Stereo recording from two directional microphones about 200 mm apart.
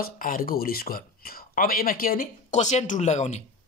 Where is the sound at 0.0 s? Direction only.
45° left (ahead or behind).